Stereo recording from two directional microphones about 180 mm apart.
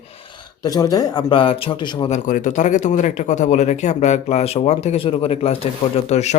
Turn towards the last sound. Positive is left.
turn(degrees=40)  # may be behind; listen again after turning